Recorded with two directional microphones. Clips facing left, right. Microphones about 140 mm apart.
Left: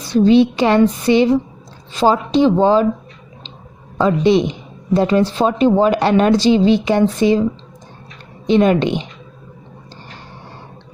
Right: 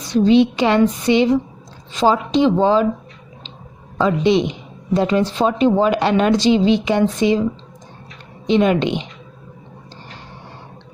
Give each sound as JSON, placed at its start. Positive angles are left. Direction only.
{"t": 0.1, "sound": "a woman's voice", "side_deg": 40}
{"t": 4.0, "sound": "a woman's voice", "side_deg": 40}
{"t": 8.4, "sound": "a woman's voice", "side_deg": 40}